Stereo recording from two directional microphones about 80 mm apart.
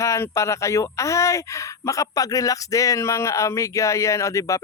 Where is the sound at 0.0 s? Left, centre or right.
Left.